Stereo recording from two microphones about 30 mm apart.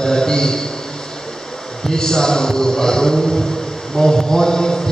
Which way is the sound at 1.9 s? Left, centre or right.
Left.